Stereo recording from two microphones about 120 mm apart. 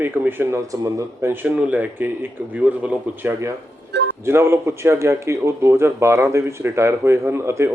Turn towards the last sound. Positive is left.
turn(degrees=-20)  # may be behind; listen again after turning